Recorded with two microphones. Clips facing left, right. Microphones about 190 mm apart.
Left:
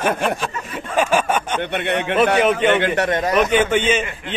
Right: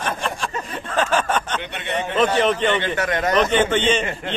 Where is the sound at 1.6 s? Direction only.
60° left (ahead or behind).